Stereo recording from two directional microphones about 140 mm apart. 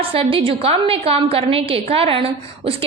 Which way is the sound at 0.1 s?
40° right (ahead or behind).